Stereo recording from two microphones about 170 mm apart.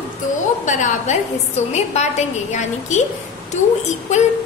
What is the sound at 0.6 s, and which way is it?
A woman's voice, 45° left (ahead or behind).